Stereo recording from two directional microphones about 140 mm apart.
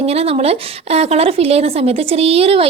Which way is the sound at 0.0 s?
45° right (ahead or behind).